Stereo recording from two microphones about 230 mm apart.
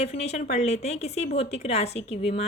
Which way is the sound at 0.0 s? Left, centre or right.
Left.